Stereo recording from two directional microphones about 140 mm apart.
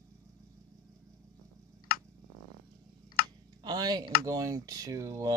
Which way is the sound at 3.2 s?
90° left.